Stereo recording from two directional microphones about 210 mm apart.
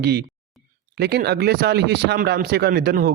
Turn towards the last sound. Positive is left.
turn(degrees=-45)  # may be behind; listen again after turning